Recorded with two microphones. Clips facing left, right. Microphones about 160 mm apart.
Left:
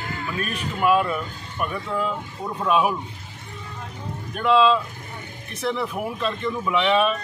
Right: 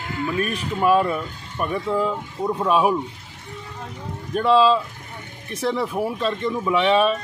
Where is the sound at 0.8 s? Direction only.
30° right (ahead or behind).